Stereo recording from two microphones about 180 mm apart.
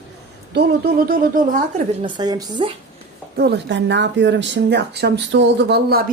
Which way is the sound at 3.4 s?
70° right (ahead or behind).